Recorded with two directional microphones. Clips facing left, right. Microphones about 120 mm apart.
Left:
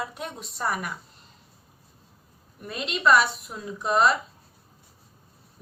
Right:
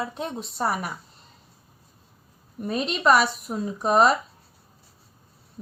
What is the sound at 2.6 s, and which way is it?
A woman's voice, 40° right (ahead or behind).